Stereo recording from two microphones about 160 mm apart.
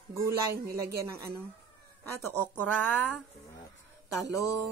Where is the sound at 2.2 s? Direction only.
10° left (ahead or behind).